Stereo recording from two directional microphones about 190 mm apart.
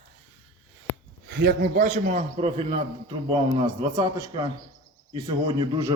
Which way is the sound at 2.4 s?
30° right (ahead or behind).